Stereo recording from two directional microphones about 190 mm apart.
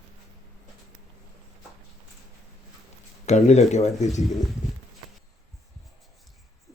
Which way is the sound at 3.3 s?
35° left (ahead or behind).